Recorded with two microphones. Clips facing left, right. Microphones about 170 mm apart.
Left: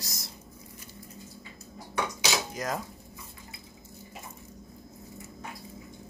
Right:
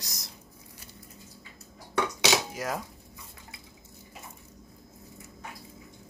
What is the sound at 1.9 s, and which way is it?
Dishes, 75° right (ahead or behind).